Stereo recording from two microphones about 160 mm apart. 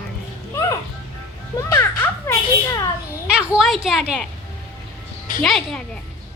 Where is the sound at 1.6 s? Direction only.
20° left (ahead or behind).